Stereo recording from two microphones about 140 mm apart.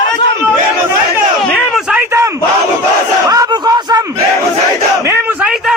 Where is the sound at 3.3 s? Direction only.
25° right (ahead or behind).